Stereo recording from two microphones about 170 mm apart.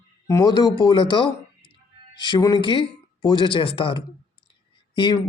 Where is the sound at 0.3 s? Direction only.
20° left (ahead or behind).